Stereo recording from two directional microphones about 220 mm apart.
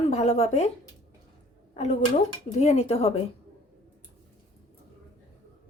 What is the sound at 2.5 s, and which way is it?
Speech, 30° left (ahead or behind).